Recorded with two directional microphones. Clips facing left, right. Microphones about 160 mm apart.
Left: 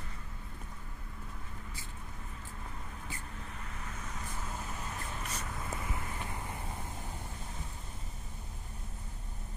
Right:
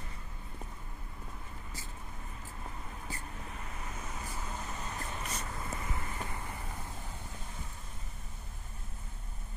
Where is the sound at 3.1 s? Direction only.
40° right (ahead or behind).